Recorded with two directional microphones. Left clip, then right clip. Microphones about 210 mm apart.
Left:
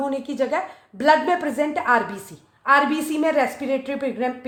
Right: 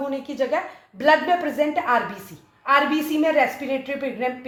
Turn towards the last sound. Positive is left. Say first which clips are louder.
# left 1 dB
turn(degrees=50)  # may be behind; listen again after turning